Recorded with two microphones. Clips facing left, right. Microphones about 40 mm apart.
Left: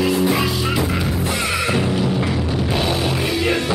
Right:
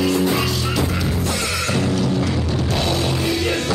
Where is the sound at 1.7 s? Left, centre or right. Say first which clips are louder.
Right 2 dB; centre.